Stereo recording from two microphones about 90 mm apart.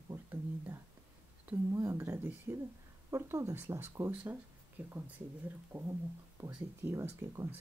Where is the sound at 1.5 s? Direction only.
20° right (ahead or behind).